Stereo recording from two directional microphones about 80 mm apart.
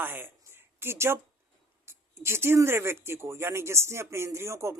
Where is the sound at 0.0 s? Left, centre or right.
Right.